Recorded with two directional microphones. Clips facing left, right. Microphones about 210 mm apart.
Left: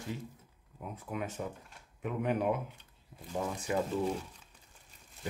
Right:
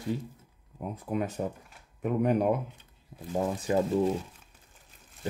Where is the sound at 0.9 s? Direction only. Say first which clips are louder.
Right 7 dB; 35° right (ahead or behind).